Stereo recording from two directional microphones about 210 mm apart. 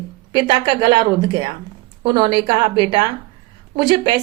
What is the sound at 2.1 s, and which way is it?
Speech, 20° right (ahead or behind).